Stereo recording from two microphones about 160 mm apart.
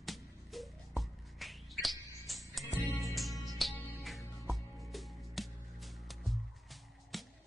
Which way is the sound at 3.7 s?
10° left (ahead or behind).